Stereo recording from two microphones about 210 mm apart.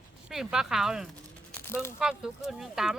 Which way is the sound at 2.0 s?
5° right (ahead or behind).